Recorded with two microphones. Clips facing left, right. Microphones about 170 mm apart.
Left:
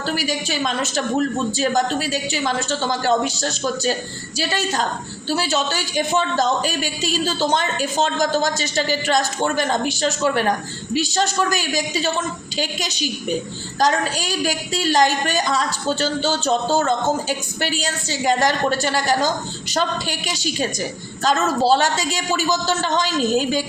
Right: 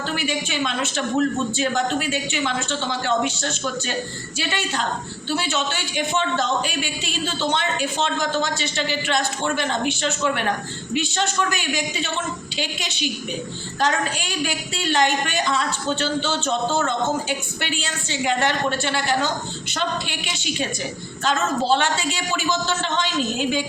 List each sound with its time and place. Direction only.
0.0 s a woman's voice: 40° left (ahead or behind)